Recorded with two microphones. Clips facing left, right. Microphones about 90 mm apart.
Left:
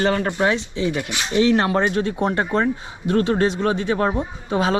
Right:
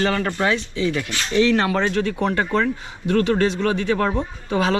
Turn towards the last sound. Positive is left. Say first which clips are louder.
# even
turn(degrees=20)  # may be behind; listen again after turning